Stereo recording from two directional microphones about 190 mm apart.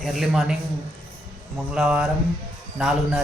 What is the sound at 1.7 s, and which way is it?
Speech, 5° right (ahead or behind).